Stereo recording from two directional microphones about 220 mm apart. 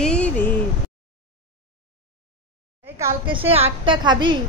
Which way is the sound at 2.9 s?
20° right (ahead or behind).